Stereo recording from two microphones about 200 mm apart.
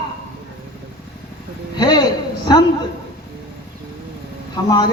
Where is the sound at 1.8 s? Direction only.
20° left (ahead or behind).